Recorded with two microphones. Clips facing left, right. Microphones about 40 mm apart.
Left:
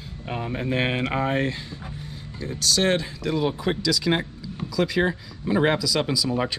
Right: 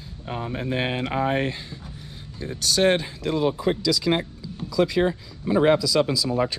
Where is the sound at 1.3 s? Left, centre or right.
Centre.